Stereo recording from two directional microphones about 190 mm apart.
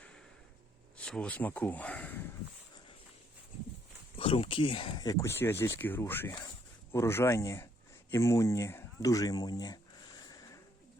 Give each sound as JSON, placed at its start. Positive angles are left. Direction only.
{"t": 0.9, "sound": "speech", "side_deg": 5}
{"t": 4.2, "sound": "speech", "side_deg": 30}
{"t": 10.2, "sound": "a sound", "side_deg": 20}